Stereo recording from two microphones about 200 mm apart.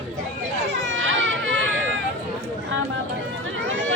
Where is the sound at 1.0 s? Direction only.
70° right (ahead or behind).